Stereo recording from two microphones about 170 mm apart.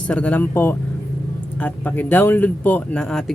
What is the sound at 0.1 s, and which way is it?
Speech, 10° left (ahead or behind).